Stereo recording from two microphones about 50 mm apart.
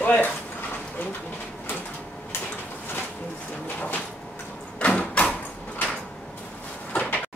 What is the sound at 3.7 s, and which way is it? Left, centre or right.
Sliding door, left.